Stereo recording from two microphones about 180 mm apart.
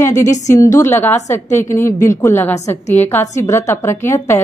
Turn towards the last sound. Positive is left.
turn(degrees=15)  # may be behind; listen again after turning